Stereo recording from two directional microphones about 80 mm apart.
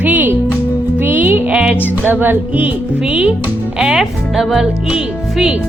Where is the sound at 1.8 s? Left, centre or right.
Right.